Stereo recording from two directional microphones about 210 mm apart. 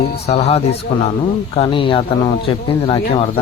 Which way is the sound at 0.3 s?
30° left (ahead or behind).